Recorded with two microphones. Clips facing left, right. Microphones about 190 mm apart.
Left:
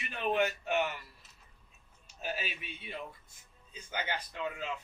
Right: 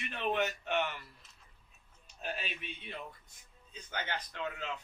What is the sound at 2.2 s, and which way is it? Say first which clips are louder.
A man's voice: left 2 dB; 5° left (ahead or behind).